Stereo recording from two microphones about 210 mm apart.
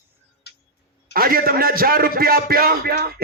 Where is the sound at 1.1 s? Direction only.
45° right (ahead or behind).